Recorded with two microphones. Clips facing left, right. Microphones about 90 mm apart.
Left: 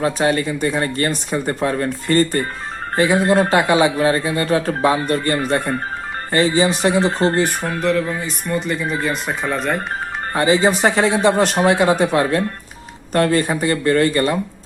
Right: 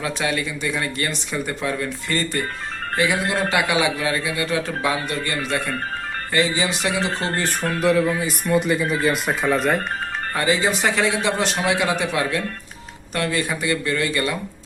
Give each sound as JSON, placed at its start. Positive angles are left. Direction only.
{"t": 0.0, "sound": "speech", "side_deg": 40}
{"t": 7.3, "sound": "speech", "side_deg": 20}
{"t": 7.7, "sound": "speech", "side_deg": -5}
{"t": 10.3, "sound": "speech", "side_deg": 30}